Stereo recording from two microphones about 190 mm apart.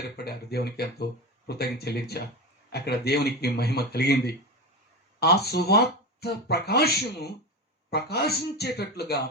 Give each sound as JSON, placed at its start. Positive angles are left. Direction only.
{"t": 0.0, "sound": "speech", "side_deg": 60}
{"t": 5.2, "sound": "speech", "side_deg": 55}